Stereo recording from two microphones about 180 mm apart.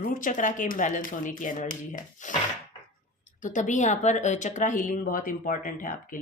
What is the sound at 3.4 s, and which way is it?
Speech, 45° left (ahead or behind).